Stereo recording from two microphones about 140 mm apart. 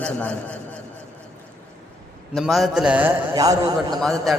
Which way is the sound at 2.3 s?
Centre (ahead or behind).